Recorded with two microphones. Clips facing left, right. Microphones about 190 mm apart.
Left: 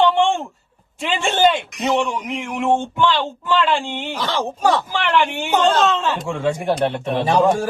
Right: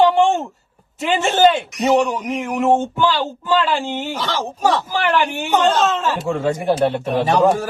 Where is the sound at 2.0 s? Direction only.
40° right (ahead or behind).